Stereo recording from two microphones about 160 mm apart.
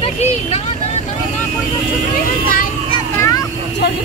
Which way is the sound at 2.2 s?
60° left (ahead or behind).